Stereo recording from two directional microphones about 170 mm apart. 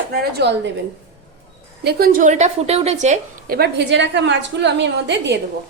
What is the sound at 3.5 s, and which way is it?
A woman's voice, 80° right.